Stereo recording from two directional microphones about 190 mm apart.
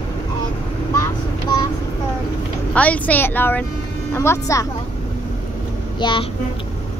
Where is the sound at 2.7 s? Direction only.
5° left (ahead or behind).